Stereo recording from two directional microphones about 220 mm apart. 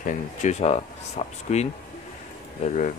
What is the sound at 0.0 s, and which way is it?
Speech, 30° left (ahead or behind).